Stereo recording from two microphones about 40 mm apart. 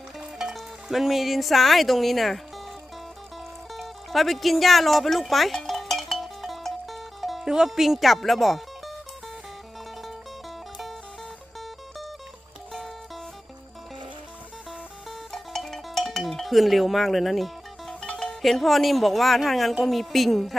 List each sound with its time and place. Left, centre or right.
0.5 s speech: centre
3.8 s music: centre
7.4 s a woman's voice: centre
15.3 s music: centre
18.4 s a woman's voice: centre